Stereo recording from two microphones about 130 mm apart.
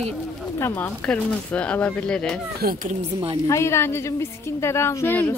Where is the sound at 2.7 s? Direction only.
90° right.